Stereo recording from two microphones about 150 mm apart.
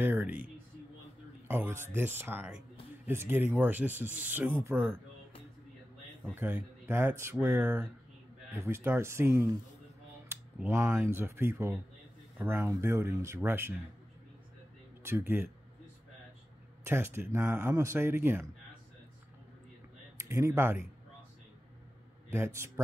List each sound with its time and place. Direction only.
0.0 s a sound: 15° right (ahead or behind)
1.5 s speech: 15° right (ahead or behind)
6.3 s speech: 15° right (ahead or behind)
15.0 s speech: 15° right (ahead or behind)
16.8 s speech: 15° right (ahead or behind)
20.2 s speech: 20° right (ahead or behind)
22.3 s speech: 15° right (ahead or behind)